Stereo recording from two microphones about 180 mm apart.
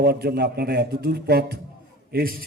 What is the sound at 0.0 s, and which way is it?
A man's voice, 60° right (ahead or behind).